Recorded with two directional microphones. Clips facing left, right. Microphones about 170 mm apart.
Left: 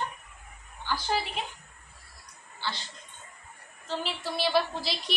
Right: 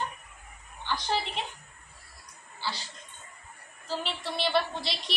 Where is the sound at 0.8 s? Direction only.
5° left (ahead or behind).